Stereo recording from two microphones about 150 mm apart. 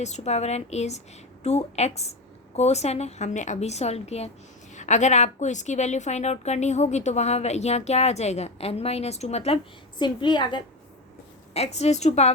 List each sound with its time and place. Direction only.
0.0 s a woman's voice: 50° left (ahead or behind)
10.0 s a woman's voice: 30° left (ahead or behind)
11.5 s a woman's voice: 45° left (ahead or behind)